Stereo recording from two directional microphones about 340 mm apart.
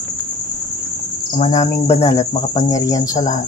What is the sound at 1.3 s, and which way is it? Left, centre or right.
Cricket, centre.